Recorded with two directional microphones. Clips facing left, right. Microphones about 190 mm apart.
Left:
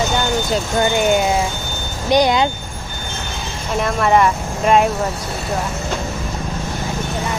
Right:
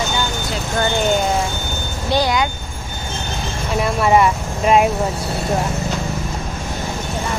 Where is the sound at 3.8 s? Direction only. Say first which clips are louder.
Even; 5° right (ahead or behind).